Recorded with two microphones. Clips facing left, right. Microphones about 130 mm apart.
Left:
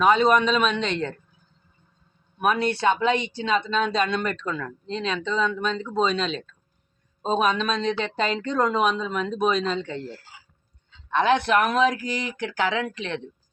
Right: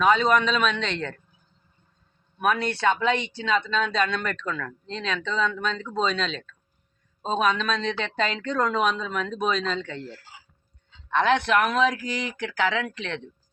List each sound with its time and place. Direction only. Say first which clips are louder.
0.0 s speech: left 2 dB; 10° left (ahead or behind)
2.4 s speech: left 2 dB; 10° left (ahead or behind)
5.0 s speech: left 1 dB; 5° left (ahead or behind)
9.8 s speech: left 3 dB; 35° left (ahead or behind)
11.1 s speech: left 1 dB; 5° left (ahead or behind)
11.9 s speech: left 1 dB; 5° left (ahead or behind)